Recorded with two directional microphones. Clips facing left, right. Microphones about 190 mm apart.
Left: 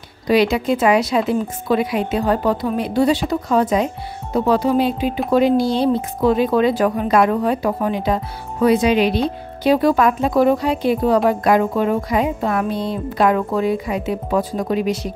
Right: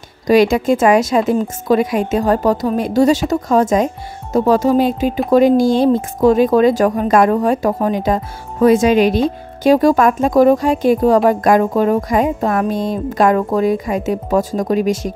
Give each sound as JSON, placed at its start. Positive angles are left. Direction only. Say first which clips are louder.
{"t": 0.3, "sound": "speech", "louder": "right 4 dB", "side_deg": -45}